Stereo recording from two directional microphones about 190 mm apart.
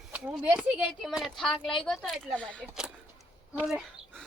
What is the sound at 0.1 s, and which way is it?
Speech, 5° right (ahead or behind).